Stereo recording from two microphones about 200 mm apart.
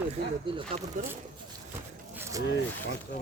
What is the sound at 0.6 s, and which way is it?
Speech, 30° right (ahead or behind).